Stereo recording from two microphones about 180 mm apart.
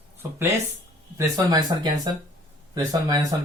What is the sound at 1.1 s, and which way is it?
A man's voice, 20° right (ahead or behind).